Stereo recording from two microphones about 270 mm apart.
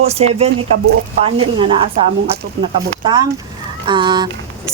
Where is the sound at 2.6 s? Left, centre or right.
Right.